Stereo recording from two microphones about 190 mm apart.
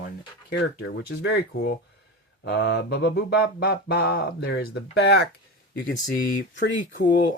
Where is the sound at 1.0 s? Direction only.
65° left (ahead or behind).